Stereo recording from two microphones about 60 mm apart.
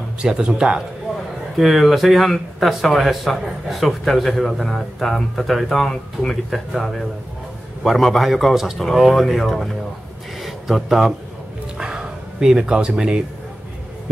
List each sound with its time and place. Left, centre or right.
0.2 s speech: centre
1.6 s a man's voice: centre
11.8 s bow-wow: centre